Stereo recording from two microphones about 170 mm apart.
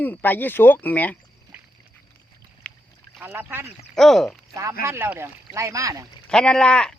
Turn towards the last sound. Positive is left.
turn(degrees=5)  # may be behind; listen again after turning